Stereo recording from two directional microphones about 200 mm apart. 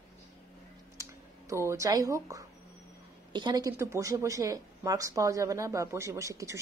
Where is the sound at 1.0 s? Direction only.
15° right (ahead or behind).